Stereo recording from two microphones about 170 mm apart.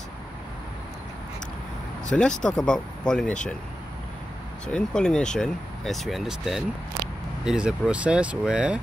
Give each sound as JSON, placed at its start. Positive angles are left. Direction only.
{"t": 2.1, "sound": "speech", "side_deg": 5}
{"t": 4.6, "sound": "speech", "side_deg": 5}